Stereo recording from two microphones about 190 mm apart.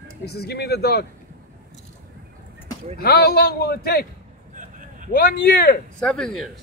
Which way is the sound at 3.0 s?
55° left (ahead or behind).